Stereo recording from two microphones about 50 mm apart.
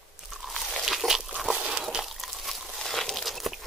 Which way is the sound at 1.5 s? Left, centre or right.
Centre.